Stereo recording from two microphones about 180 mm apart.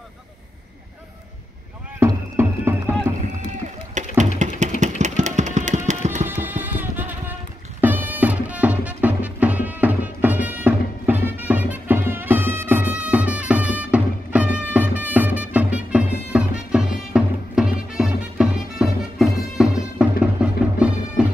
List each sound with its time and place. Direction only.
2.0 s rowboat: 15° right (ahead or behind)
4.0 s a sound: 40° right (ahead or behind)
6.2 s music: 10° right (ahead or behind)